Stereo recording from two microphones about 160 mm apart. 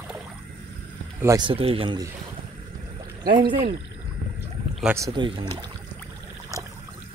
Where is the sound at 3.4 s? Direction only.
35° right (ahead or behind).